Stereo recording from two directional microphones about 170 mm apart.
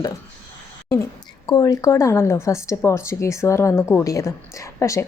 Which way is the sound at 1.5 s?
25° left (ahead or behind).